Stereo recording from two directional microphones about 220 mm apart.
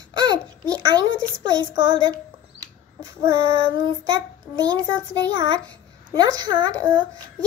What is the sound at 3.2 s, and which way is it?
Speech, 15° right (ahead or behind).